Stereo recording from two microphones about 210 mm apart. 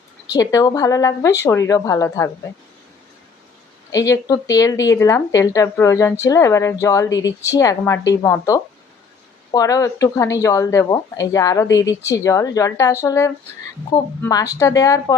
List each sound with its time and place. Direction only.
0.3 s speech: 15° left (ahead or behind)
3.9 s speech: 15° left (ahead or behind)